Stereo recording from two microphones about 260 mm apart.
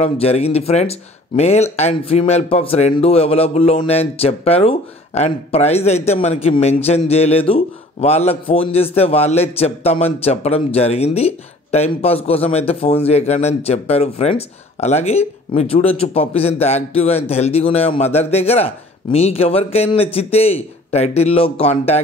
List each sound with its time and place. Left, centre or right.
0.0 s speech: left